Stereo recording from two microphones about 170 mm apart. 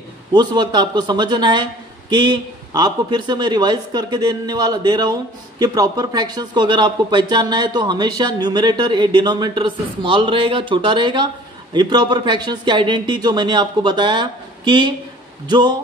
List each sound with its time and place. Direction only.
0.3 s a man's voice: 25° right (ahead or behind)